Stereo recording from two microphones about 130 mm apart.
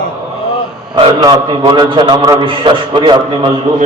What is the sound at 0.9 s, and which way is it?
A man's voice, 35° right (ahead or behind).